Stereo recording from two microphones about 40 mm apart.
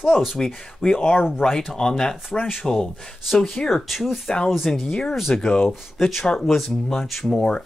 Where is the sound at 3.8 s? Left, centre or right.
Centre.